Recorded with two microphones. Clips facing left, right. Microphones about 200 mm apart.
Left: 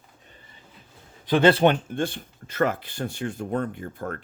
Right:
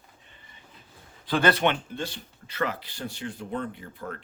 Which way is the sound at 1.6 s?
45° left (ahead or behind).